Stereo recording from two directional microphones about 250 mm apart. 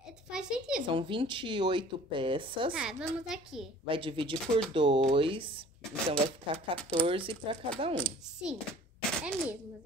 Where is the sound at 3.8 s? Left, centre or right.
Right.